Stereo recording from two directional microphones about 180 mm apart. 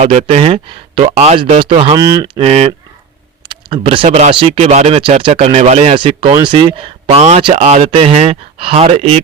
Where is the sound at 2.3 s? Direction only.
35° right (ahead or behind).